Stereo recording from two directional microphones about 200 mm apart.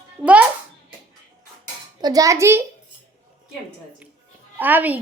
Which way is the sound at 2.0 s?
20° right (ahead or behind).